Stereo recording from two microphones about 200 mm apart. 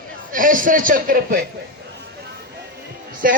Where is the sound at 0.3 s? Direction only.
40° right (ahead or behind).